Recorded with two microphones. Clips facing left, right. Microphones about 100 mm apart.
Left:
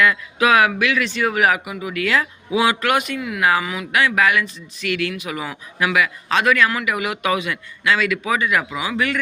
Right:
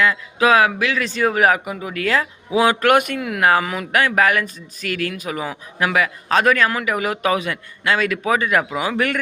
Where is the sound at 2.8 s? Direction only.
50° right (ahead or behind).